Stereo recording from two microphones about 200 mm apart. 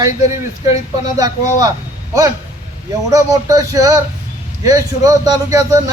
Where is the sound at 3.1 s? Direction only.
15° right (ahead or behind).